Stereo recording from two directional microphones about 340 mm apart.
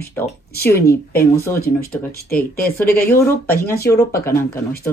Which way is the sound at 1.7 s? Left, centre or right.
Left.